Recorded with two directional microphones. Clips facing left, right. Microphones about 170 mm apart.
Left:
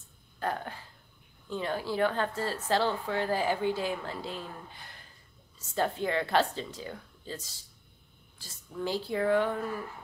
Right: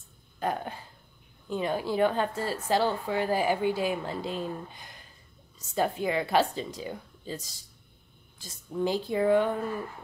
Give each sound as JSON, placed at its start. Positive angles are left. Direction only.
{"t": 0.4, "sound": "speech", "side_deg": -15}